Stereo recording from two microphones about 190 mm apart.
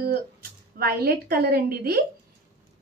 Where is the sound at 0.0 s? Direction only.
55° right (ahead or behind).